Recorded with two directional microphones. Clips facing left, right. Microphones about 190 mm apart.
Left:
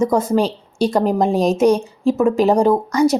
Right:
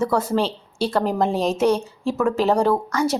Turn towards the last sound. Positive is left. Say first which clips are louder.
# left 5 dB
turn(degrees=15)  # may be behind; listen again after turning